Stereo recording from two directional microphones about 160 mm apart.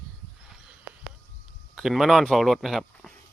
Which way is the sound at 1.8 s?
Centre (ahead or behind).